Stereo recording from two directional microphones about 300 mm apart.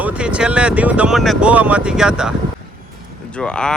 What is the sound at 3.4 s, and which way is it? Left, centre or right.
Speech, centre.